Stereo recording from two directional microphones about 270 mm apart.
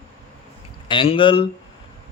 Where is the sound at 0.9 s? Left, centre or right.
Centre.